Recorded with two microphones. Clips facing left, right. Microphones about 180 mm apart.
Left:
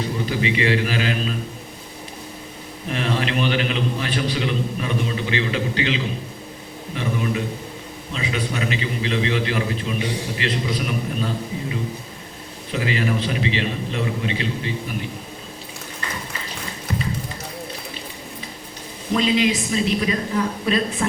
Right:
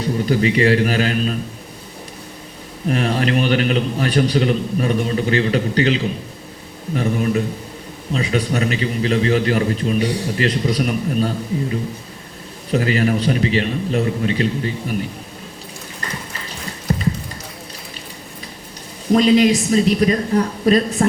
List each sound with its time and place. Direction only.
0.3 s a man's voice: 40° right (ahead or behind)
2.9 s a man's voice: 45° right (ahead or behind)
12.7 s a man's voice: 45° right (ahead or behind)
16.9 s a sound: 40° right (ahead or behind)
19.1 s a man's voice: 40° right (ahead or behind)